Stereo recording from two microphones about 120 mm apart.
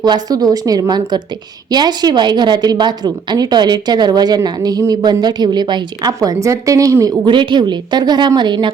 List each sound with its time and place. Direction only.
0.0 s a woman's voice: 35° right (ahead or behind)
7.3 s a woman's voice: 40° right (ahead or behind)